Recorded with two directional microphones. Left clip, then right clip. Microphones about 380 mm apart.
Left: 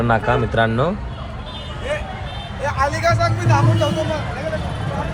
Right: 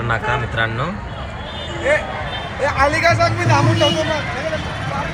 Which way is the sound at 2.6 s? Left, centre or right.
Centre.